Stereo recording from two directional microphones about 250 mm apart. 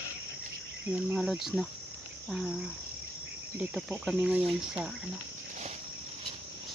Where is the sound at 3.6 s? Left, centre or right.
Centre.